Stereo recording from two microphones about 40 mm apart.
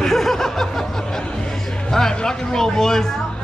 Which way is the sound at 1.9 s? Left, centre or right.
Centre.